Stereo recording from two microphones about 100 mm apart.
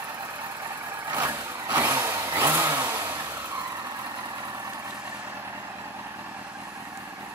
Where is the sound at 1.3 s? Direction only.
25° right (ahead or behind).